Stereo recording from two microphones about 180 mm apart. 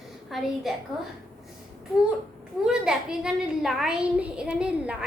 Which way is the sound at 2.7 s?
5° right (ahead or behind).